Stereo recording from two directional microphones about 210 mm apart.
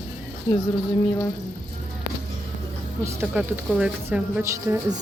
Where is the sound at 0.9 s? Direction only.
25° left (ahead or behind).